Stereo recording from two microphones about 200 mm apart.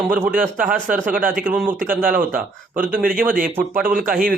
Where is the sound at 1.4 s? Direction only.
10° right (ahead or behind).